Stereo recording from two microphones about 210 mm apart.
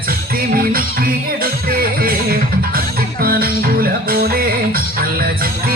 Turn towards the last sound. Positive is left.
turn(degrees=-45)  # may be behind; listen again after turning